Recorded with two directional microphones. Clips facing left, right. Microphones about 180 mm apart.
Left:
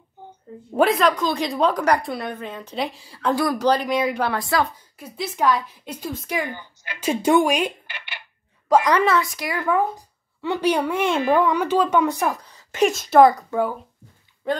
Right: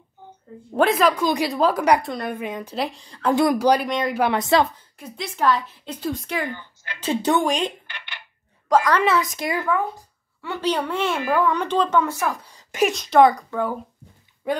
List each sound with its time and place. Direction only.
0.7 s speech: centre (ahead or behind)
2.3 s a woman's voice: 10° right (ahead or behind)
2.7 s speech: centre (ahead or behind)
3.5 s a woman's voice: 10° right (ahead or behind)
3.9 s speech: 5° left (ahead or behind)
4.2 s speech: 20° right (ahead or behind)
4.9 s a woman's voice: 5° left (ahead or behind)
9.2 s speech: 20° right (ahead or behind)
9.7 s speech: 20° left (ahead or behind)
11.5 s a woman's voice: 5° left (ahead or behind)
12.4 s a sound: 10° right (ahead or behind)
12.9 s speech: 5° left (ahead or behind)